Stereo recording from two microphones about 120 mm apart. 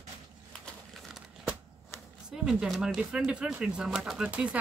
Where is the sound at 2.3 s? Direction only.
5° right (ahead or behind).